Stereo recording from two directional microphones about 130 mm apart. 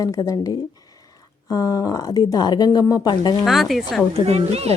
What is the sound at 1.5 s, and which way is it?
Speech, 25° left (ahead or behind).